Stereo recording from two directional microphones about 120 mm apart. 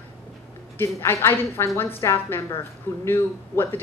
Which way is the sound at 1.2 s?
20° left (ahead or behind).